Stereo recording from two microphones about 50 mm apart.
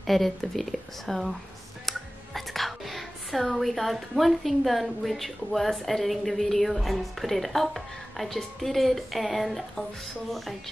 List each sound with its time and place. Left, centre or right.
0.0 s speech: centre